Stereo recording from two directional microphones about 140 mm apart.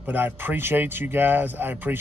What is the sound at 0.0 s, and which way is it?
A man's voice, 15° right (ahead or behind).